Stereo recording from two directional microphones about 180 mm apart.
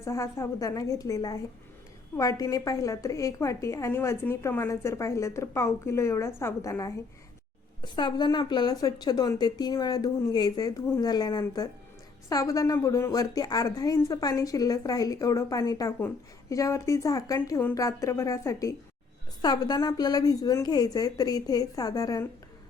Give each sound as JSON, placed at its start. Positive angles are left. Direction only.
{"t": 0.0, "sound": "a woman's voice", "side_deg": 15}